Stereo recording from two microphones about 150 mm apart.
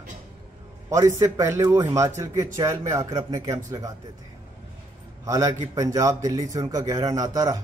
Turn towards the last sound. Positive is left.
turn(degrees=-25)  # may be behind; listen again after turning